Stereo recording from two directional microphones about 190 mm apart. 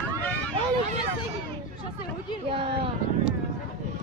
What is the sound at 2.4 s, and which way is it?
Speech, 30° right (ahead or behind).